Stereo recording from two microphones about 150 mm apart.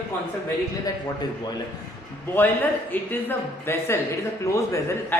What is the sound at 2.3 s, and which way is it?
A man's voice, 10° left (ahead or behind).